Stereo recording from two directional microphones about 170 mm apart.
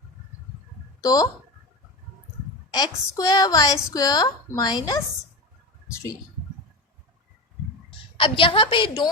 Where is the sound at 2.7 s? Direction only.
20° left (ahead or behind).